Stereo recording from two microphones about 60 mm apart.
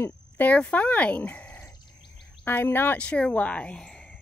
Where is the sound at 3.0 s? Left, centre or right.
Centre.